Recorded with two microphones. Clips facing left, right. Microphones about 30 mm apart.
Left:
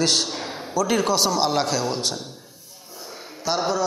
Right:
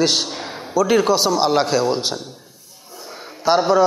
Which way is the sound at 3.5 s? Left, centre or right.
Right.